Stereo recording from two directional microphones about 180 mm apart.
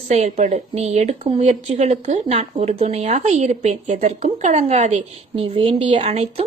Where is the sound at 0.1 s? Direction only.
40° right (ahead or behind).